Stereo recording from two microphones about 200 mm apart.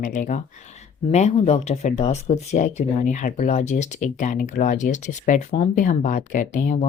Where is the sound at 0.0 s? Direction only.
40° left (ahead or behind).